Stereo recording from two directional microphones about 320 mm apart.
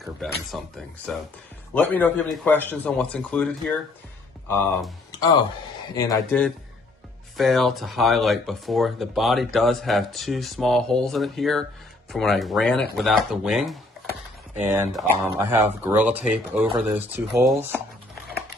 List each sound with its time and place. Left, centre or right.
0.5 s speech: centre